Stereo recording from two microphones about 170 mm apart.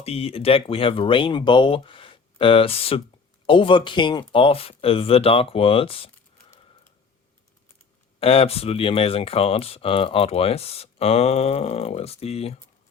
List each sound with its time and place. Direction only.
0.0 s speech: 35° left (ahead or behind)
8.2 s speech: 35° left (ahead or behind)